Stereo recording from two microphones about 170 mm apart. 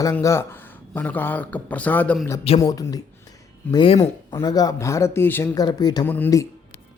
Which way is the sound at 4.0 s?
20° left (ahead or behind).